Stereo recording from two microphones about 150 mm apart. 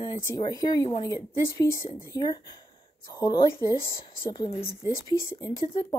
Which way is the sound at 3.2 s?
30° left (ahead or behind).